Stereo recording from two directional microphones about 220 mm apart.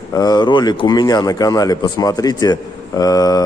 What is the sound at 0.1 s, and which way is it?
Speech, 15° left (ahead or behind).